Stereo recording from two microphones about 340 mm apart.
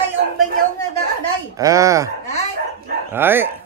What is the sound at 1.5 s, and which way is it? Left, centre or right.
Speech, centre.